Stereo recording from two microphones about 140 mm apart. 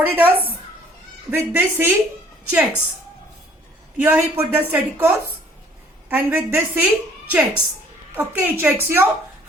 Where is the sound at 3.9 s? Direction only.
10° right (ahead or behind).